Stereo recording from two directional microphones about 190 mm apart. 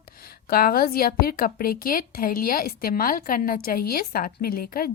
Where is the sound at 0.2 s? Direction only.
50° left (ahead or behind).